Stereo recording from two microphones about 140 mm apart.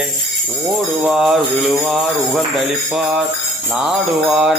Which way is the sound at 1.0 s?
5° right (ahead or behind).